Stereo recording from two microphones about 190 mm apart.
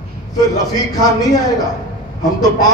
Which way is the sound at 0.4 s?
20° left (ahead or behind).